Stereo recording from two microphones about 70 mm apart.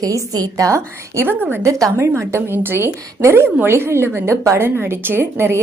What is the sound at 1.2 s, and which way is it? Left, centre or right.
Speech, right.